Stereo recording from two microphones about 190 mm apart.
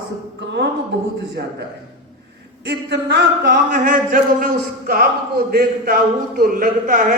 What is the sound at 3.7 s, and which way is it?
A man's voice, 45° right (ahead or behind).